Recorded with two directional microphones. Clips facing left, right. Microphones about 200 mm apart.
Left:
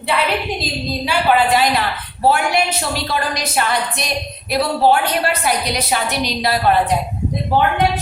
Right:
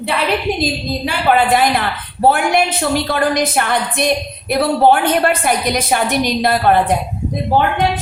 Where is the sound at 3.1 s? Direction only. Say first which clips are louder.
Right 6 dB; 55° right (ahead or behind).